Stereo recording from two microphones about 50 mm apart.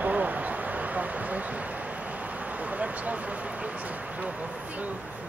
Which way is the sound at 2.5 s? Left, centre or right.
Right.